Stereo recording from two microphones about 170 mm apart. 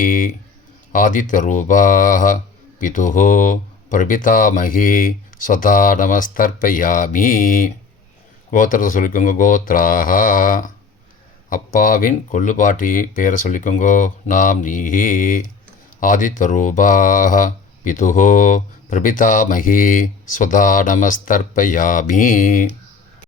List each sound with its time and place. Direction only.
0.0 s speech: 55° left (ahead or behind)